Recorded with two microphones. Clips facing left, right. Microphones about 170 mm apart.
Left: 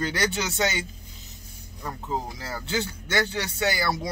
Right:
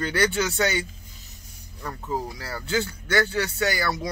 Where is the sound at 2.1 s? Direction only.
20° left (ahead or behind).